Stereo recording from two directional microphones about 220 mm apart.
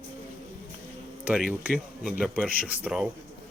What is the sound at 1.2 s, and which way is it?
Speech, 5° right (ahead or behind).